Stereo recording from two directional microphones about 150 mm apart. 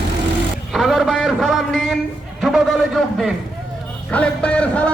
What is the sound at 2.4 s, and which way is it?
Speech, centre (ahead or behind).